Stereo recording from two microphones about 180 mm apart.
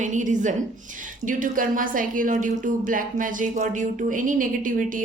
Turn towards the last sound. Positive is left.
turn(degrees=-50)  # may be behind; listen again after turning